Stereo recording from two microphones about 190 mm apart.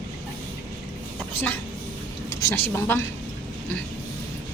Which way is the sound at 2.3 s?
15° left (ahead or behind).